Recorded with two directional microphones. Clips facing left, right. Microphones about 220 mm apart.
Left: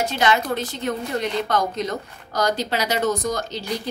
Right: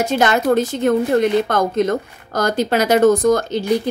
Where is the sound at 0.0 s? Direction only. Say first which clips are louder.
Right 5 dB; 50° right (ahead or behind).